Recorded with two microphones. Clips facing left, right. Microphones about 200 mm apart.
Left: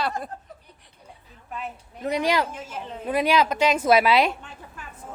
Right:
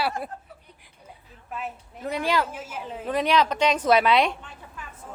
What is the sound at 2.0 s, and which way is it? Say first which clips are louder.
Speech: left 2 dB; 15° left (ahead or behind).